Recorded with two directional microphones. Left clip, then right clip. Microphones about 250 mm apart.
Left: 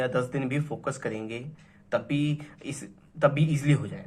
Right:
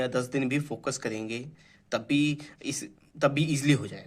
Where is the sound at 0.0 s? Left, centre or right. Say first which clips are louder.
Left 1 dB; right.